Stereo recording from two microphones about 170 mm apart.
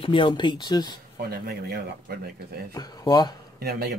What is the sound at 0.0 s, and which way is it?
Speech, 30° left (ahead or behind).